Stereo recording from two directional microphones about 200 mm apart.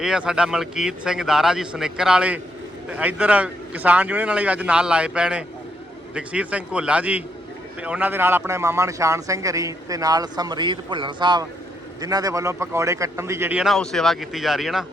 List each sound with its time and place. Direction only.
0.0 s a man's voice: 5° right (ahead or behind)